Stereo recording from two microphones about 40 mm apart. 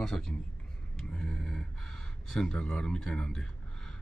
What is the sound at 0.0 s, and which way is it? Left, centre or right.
Speech, centre.